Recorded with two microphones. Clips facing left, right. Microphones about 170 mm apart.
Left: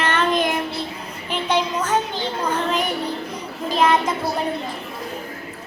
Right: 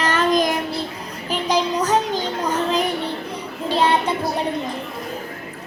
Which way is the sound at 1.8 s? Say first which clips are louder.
Right 3 dB; 40° right (ahead or behind).